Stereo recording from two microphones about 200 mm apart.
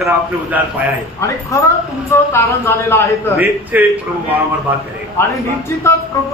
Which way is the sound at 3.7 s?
10° right (ahead or behind).